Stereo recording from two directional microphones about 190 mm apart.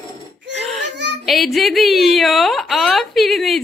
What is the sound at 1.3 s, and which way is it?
A woman's voice, centre (ahead or behind).